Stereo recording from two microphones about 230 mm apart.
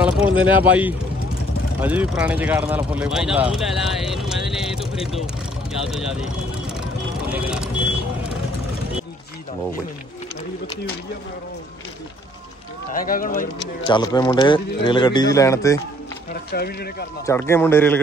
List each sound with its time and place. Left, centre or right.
0.0 s speech: centre
12.9 s speech: left
13.8 s speech: centre
16.5 s speech: left
17.3 s speech: centre